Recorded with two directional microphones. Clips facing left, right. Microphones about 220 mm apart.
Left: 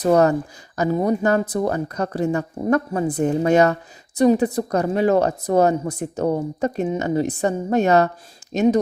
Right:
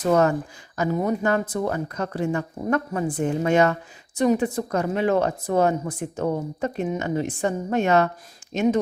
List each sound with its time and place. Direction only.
0.0 s a woman's voice: 35° left (ahead or behind)